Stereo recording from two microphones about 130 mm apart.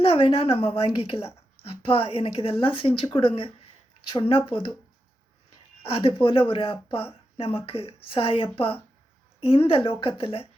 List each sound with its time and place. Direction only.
0.0 s speech: 45° left (ahead or behind)
5.9 s speech: 45° left (ahead or behind)